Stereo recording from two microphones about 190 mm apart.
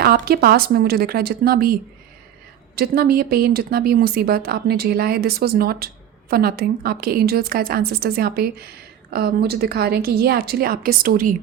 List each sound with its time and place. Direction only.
0.0 s speech: 55° right (ahead or behind)